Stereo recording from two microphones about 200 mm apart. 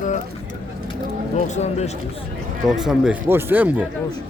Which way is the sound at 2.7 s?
Centre (ahead or behind).